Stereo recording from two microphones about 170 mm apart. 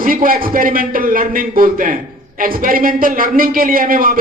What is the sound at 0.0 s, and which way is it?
A man's voice, 55° right (ahead or behind).